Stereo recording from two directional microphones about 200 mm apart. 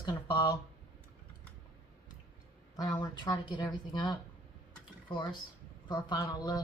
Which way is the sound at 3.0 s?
20° left (ahead or behind).